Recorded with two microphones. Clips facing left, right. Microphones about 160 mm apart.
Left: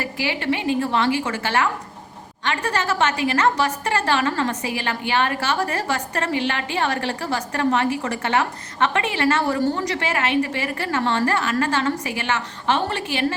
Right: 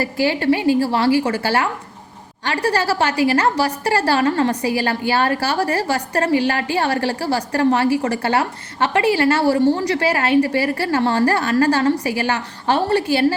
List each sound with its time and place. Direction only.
0.0 s a woman's voice: 40° right (ahead or behind)